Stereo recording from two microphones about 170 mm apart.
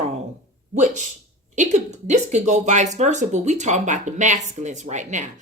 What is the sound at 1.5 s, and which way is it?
Speech, 45° right (ahead or behind).